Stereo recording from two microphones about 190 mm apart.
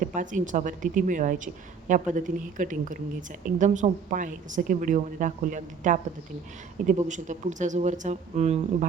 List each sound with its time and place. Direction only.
0.0 s speech: 45° right (ahead or behind)